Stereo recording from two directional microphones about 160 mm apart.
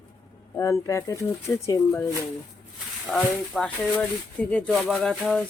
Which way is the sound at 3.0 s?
Centre (ahead or behind).